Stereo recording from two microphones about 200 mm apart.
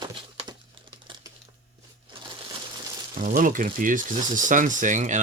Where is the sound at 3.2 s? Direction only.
40° right (ahead or behind).